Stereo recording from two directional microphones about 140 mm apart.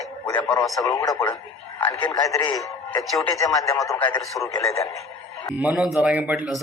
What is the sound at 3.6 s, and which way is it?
Speech, 20° left (ahead or behind).